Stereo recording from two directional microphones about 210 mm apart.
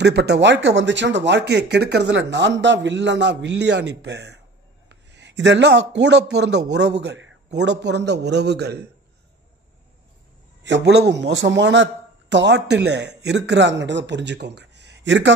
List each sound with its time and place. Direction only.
0.0 s a man's voice: 55° right (ahead or behind)
10.6 s a man's voice: 55° right (ahead or behind)